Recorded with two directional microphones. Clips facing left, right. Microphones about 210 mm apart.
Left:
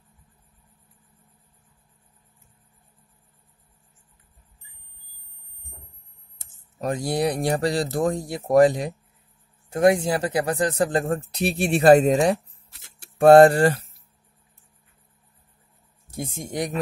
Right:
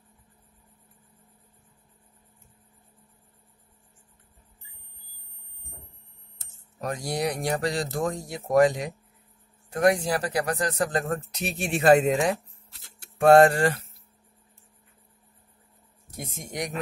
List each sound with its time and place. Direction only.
6.8 s a man's voice: 30° left (ahead or behind)
16.2 s a man's voice: 30° left (ahead or behind)